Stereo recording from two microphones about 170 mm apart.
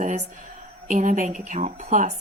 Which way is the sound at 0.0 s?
45° right (ahead or behind).